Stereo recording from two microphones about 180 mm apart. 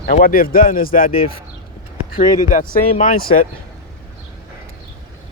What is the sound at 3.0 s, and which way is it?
Speech, 45° left (ahead or behind).